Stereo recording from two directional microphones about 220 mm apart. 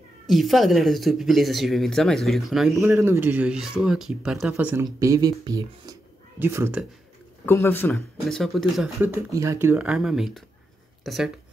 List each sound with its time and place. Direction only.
0.3 s speech: centre (ahead or behind)
2.8 s speech: 10° right (ahead or behind)
7.4 s speech: 10° left (ahead or behind)